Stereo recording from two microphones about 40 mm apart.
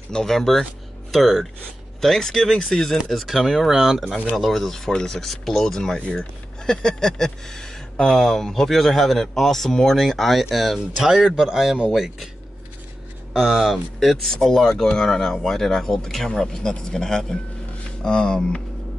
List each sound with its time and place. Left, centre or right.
0.1 s speech: centre
3.1 s speech: centre
11.1 s speech: centre
13.4 s speech: centre
13.9 s speech: centre